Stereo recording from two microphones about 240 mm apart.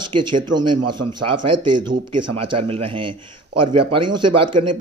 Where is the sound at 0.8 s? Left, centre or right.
Right.